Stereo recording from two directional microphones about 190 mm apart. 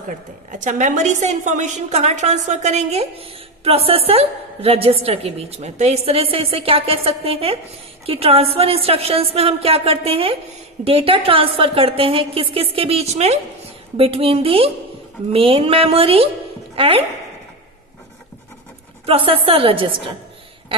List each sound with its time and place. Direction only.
0.5 s a woman's voice: 40° right (ahead or behind)
19.0 s a woman's voice: 30° right (ahead or behind)